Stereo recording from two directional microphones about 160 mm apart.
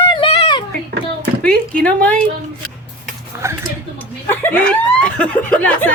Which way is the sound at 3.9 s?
10° left (ahead or behind).